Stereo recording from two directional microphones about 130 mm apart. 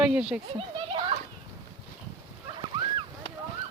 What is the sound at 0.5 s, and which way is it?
Children playing, 40° right (ahead or behind).